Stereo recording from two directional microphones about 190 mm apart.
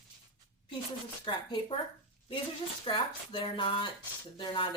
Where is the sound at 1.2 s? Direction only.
25° left (ahead or behind).